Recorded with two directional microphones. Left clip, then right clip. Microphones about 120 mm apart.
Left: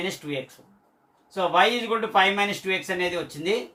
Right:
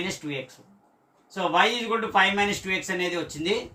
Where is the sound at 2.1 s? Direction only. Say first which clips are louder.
Left 1 dB; 25° right (ahead or behind).